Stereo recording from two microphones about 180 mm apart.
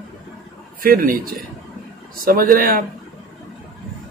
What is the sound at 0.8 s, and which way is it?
Speech, 55° right (ahead or behind).